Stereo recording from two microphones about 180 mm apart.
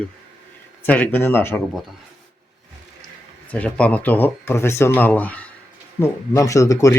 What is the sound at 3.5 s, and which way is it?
Speech, 5° left (ahead or behind).